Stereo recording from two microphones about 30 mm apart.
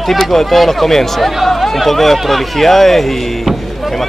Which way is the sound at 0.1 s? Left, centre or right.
Centre.